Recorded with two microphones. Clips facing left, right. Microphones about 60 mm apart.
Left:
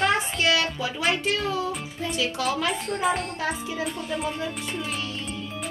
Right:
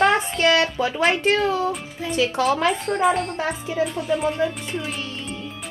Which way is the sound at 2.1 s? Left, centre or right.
Right.